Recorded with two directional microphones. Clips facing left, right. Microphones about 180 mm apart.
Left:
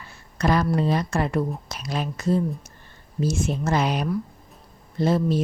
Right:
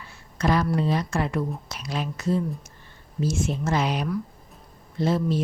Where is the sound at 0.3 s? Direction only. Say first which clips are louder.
Left 1 dB; 45° left (ahead or behind).